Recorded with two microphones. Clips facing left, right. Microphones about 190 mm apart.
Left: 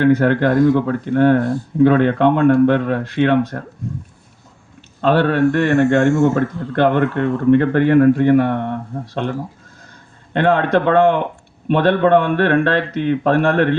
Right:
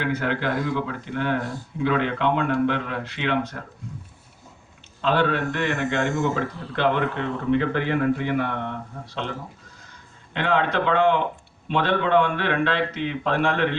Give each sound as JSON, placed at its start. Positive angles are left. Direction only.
{"t": 0.0, "sound": "speech", "side_deg": 50}
{"t": 4.9, "sound": "speech", "side_deg": 55}
{"t": 10.3, "sound": "speech", "side_deg": 50}